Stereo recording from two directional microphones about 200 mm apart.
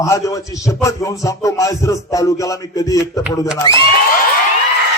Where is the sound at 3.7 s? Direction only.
25° right (ahead or behind).